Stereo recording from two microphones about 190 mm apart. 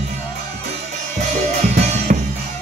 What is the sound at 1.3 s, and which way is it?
Drum, 40° right (ahead or behind).